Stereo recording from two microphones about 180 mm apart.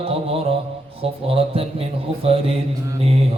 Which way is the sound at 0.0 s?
30° right (ahead or behind).